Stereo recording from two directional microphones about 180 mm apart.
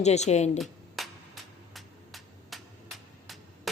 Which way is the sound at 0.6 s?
Centre (ahead or behind).